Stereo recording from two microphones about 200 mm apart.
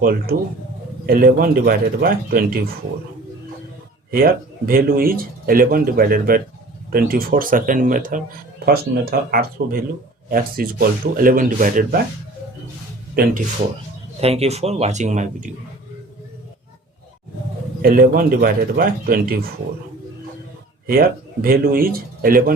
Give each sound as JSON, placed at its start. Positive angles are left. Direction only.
{"t": 0.0, "sound": "speech", "side_deg": -50}
{"t": 4.1, "sound": "speech", "side_deg": -45}
{"t": 13.2, "sound": "speech", "side_deg": -50}
{"t": 14.2, "sound": "speech", "side_deg": -30}
{"t": 17.8, "sound": "speech", "side_deg": -45}
{"t": 21.4, "sound": "speech", "side_deg": -45}